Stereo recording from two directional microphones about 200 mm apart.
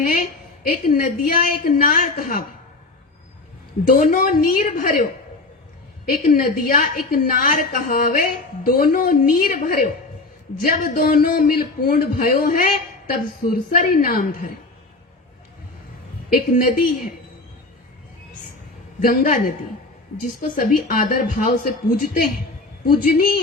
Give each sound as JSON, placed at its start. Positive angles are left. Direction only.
{"t": 0.0, "sound": "a woman's voice", "side_deg": 45}
{"t": 3.8, "sound": "a woman's voice", "side_deg": 40}
{"t": 16.3, "sound": "a woman's voice", "side_deg": 45}
{"t": 18.9, "sound": "a woman's voice", "side_deg": 45}